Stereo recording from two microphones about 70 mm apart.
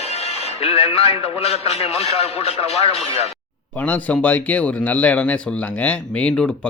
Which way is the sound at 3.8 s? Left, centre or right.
Left.